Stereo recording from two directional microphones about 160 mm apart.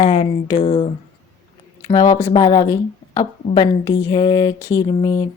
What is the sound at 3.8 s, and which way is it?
Speech, 20° left (ahead or behind).